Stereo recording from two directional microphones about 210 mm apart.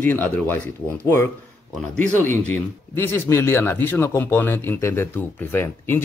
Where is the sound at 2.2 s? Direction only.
10° left (ahead or behind).